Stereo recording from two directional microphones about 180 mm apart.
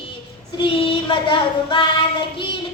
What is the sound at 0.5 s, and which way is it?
Child singing, 30° left (ahead or behind).